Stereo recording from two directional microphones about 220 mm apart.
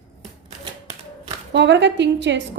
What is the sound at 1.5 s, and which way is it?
Speech, 55° right (ahead or behind).